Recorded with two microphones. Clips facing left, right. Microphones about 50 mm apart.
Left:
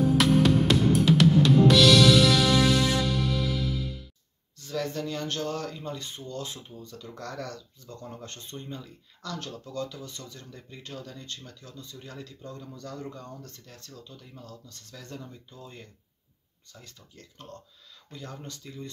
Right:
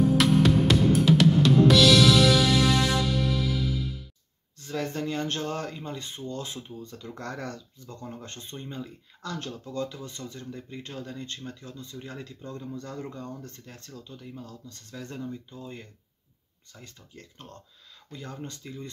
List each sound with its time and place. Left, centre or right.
0.0 s music: centre
4.6 s speech: right
7.8 s speech: centre; by 14.2 s right
14.2 s speech: right
16.8 s speech: right
18.1 s speech: centre